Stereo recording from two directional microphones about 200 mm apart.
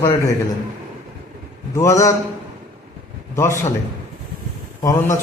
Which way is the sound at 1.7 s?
15° left (ahead or behind).